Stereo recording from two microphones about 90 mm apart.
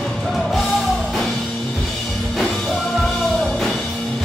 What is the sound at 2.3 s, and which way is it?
Music, 5° left (ahead or behind).